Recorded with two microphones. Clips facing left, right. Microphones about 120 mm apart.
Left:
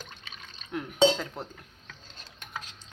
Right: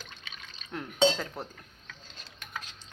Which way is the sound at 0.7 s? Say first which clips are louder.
Left 3 dB; 5° left (ahead or behind).